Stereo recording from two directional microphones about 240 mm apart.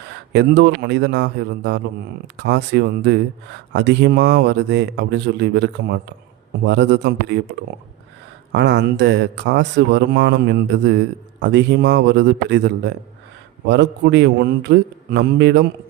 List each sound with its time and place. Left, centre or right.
0.3 s a man's voice: right
8.5 s a man's voice: right